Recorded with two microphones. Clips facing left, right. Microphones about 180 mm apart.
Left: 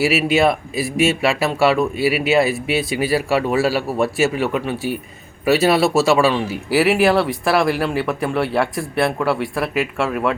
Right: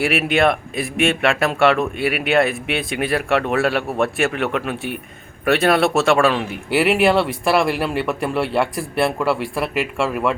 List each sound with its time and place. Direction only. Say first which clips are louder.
0.3 s speech: left 1 dB; 5° left (ahead or behind)
2.0 s speech: left 3 dB; 55° right (ahead or behind)
2.2 s speech: right 2 dB; 5° left (ahead or behind)